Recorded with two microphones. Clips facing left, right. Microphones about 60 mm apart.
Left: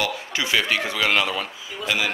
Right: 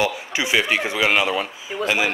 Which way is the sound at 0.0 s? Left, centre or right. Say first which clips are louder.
Right 3 dB; centre.